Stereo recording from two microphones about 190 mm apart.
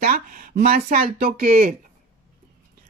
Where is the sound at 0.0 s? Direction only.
50° right (ahead or behind).